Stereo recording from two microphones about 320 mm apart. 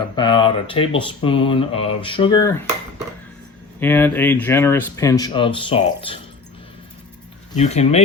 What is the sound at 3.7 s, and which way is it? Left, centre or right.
Speech, centre.